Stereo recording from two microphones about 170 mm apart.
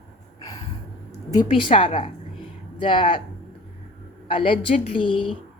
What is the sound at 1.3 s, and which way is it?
A woman's voice, 30° left (ahead or behind).